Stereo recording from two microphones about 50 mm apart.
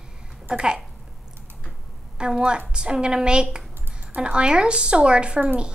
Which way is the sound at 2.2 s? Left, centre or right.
Centre.